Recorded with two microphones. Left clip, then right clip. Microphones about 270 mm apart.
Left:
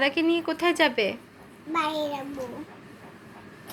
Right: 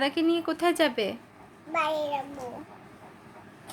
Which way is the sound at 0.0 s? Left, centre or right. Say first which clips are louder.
Left 2 dB; centre.